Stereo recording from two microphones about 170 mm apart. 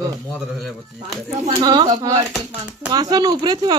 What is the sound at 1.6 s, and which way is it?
Speech, 25° right (ahead or behind).